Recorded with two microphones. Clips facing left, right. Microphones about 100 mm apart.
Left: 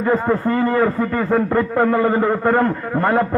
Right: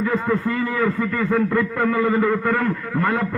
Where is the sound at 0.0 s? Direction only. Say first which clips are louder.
Left 4 dB; 40° left (ahead or behind).